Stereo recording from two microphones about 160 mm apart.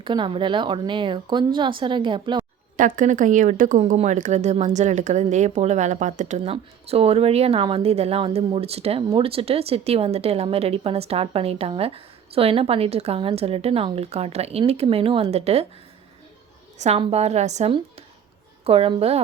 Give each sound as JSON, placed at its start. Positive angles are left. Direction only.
{"t": 0.0, "sound": "a woman's voice", "side_deg": -30}
{"t": 2.7, "sound": "a woman's voice", "side_deg": -55}
{"t": 16.7, "sound": "a woman's voice", "side_deg": -45}